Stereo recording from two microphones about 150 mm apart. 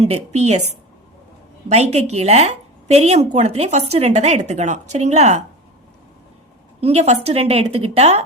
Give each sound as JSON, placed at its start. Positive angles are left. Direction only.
{"t": 0.0, "sound": "speech", "side_deg": -45}
{"t": 1.7, "sound": "speech", "side_deg": -45}
{"t": 6.8, "sound": "speech", "side_deg": -45}